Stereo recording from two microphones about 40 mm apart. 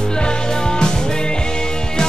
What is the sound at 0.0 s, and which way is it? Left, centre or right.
Music, left.